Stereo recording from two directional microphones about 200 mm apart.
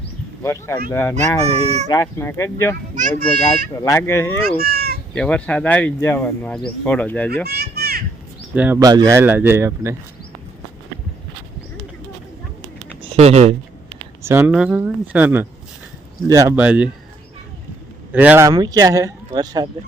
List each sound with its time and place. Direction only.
0.4 s speech: 15° left (ahead or behind)
1.5 s speech: 30° right (ahead or behind)
1.9 s speech: 15° left (ahead or behind)
2.9 s speech: 40° right (ahead or behind)
3.7 s speech: 15° left (ahead or behind)
4.4 s speech: 50° right (ahead or behind)
5.1 s speech: 5° left (ahead or behind)
7.4 s children playing: 55° right (ahead or behind)
8.5 s speech: 5° right (ahead or behind)
8.8 s speech: 20° right (ahead or behind)
13.0 s speech: 30° right (ahead or behind)
14.2 s speech: 10° right (ahead or behind)
18.1 s speech: 10° right (ahead or behind)